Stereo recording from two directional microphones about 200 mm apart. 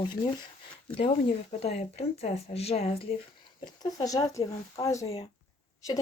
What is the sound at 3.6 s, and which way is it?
Speech, 20° left (ahead or behind).